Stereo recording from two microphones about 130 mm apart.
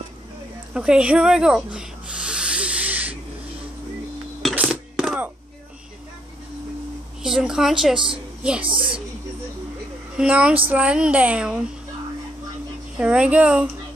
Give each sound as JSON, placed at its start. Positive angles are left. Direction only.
{"t": 0.7, "sound": "rub", "side_deg": -5}
{"t": 4.6, "sound": "a sound", "side_deg": -5}
{"t": 7.2, "sound": "a woman's voice", "side_deg": -5}
{"t": 8.6, "sound": "speech", "side_deg": -40}
{"t": 10.1, "sound": "a child's voice", "side_deg": -10}
{"t": 12.9, "sound": "a child's voice", "side_deg": -10}